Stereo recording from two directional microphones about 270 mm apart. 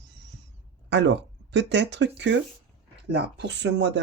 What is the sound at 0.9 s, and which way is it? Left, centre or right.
Speech, right.